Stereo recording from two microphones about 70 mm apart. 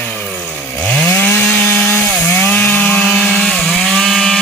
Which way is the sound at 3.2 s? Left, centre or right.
Centre.